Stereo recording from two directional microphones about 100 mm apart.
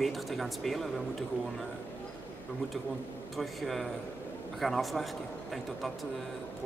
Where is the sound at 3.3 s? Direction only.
Centre (ahead or behind).